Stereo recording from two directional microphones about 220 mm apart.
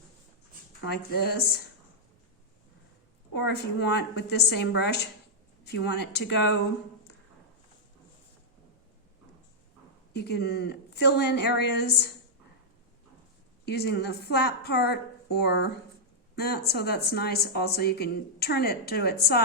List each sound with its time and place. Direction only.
0.9 s a woman's voice: 45° left (ahead or behind)
3.3 s a woman's voice: 50° left (ahead or behind)
10.1 s a woman's voice: 50° left (ahead or behind)
13.7 s a woman's voice: 50° left (ahead or behind)